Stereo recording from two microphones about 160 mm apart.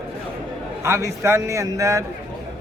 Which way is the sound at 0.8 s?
20° right (ahead or behind).